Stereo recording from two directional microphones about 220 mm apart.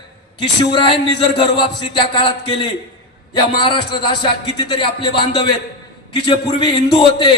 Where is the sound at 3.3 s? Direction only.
20° left (ahead or behind).